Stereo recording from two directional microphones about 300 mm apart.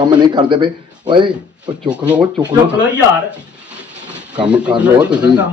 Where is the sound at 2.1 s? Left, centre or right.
Centre.